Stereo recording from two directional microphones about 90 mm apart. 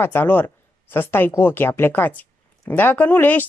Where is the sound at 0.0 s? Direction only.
25° left (ahead or behind).